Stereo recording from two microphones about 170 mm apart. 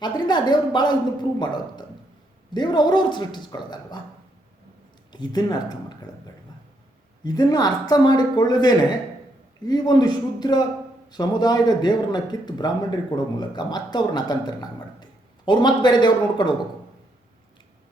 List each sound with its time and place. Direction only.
0.0 s a man's voice: 25° left (ahead or behind)
5.1 s a man's voice: 25° left (ahead or behind)
7.3 s a man's voice: 25° left (ahead or behind)